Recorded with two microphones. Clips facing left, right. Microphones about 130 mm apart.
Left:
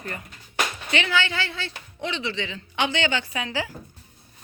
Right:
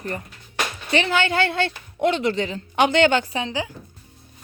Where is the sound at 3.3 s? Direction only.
25° right (ahead or behind).